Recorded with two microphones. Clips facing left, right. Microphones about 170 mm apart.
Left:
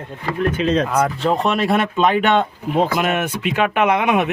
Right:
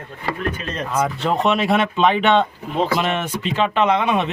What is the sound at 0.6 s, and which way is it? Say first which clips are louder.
Speech: left 8 dB; 90° left.